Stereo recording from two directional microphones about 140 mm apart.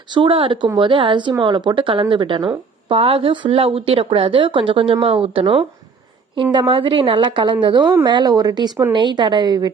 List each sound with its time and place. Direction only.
0.1 s a woman's voice: 40° right (ahead or behind)